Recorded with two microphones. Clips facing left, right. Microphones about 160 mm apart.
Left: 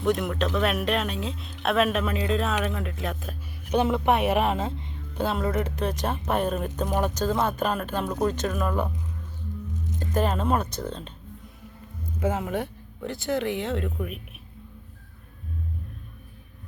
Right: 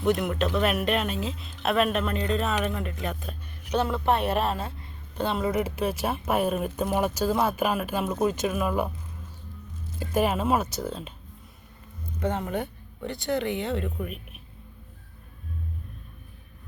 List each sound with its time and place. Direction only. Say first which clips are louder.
0.0 s speech: even; centre (ahead or behind)
3.8 s speech: left 2 dB; 15° left (ahead or behind)
5.1 s speech: even; 5° left (ahead or behind)
10.0 s speech: right 1 dB; 10° right (ahead or behind)
12.2 s speech: left 1 dB; 5° left (ahead or behind)